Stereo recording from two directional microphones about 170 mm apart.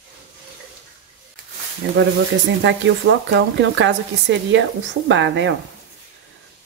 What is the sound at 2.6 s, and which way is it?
A woman's voice, 90° right.